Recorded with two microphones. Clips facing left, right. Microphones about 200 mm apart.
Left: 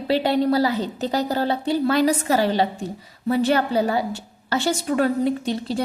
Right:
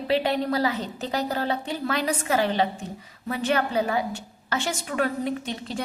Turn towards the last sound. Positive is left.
turn(degrees=35)  # may be behind; listen again after turning